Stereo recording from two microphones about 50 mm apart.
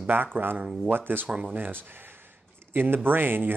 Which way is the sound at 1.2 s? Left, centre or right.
Centre.